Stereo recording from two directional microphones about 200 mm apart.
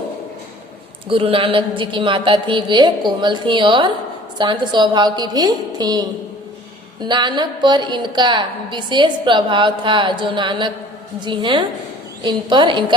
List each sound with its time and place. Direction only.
1.0 s a woman's voice: 25° right (ahead or behind)